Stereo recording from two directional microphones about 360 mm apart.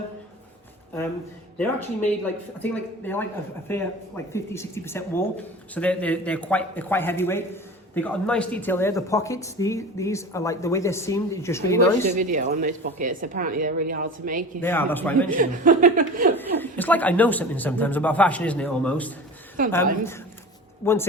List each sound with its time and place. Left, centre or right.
1.5 s speech: centre
12.1 s a woman's voice: right
14.6 s speech: centre
15.4 s a woman's voice: right
16.6 s speech: centre
19.6 s a woman's voice: right
20.8 s speech: centre